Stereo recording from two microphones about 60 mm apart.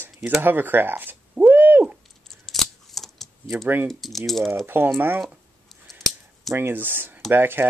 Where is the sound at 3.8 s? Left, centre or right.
Centre.